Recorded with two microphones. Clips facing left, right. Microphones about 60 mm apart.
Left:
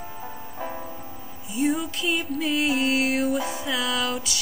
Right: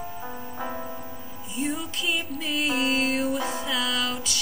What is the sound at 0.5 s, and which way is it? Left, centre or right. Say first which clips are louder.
Music: even; right.